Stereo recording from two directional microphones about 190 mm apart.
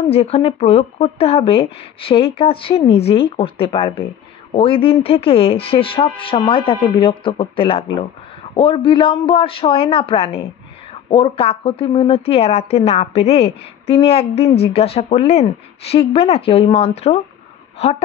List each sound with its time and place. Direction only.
0.1 s a woman's voice: 30° left (ahead or behind)